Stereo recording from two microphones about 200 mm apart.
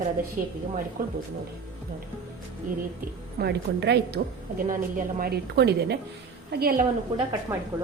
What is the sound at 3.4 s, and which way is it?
Speech, 55° right (ahead or behind).